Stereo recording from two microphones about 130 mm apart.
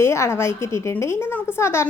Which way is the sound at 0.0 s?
20° left (ahead or behind).